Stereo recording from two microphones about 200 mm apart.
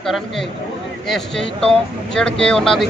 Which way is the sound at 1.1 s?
5° left (ahead or behind).